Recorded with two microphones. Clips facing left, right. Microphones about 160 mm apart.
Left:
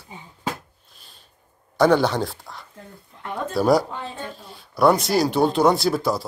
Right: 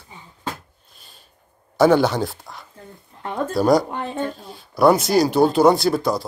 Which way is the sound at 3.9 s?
55° right (ahead or behind).